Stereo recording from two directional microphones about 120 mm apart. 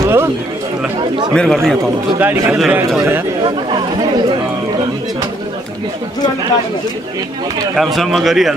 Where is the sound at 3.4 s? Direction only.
40° right (ahead or behind).